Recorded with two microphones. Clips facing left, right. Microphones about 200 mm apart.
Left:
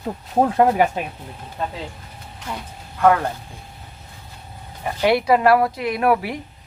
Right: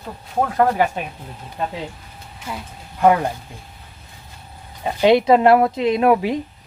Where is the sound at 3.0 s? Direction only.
15° right (ahead or behind).